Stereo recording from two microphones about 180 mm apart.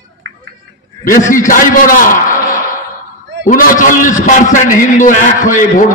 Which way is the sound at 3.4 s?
50° left (ahead or behind).